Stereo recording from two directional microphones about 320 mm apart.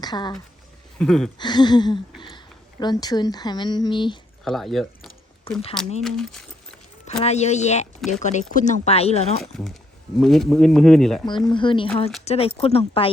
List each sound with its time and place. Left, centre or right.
0.0 s speech: centre
0.9 s speech: centre
1.4 s speech: centre
4.4 s a sound: centre
6.0 s speech: centre
7.3 s speech: left
9.5 s speech: centre
11.3 s speech: centre